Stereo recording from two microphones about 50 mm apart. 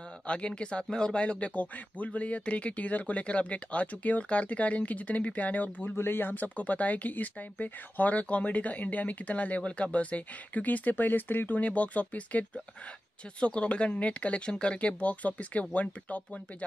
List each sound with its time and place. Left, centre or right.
0.3 s speech: left
5.9 s speech: left